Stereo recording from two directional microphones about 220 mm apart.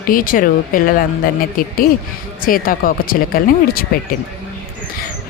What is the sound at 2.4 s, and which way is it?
Speech, 40° left (ahead or behind).